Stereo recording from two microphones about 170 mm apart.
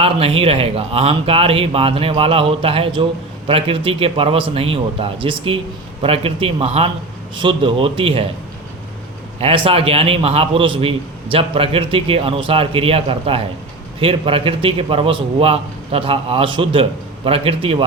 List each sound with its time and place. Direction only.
0.0 s speech: 35° right (ahead or behind)
9.4 s speech: 35° right (ahead or behind)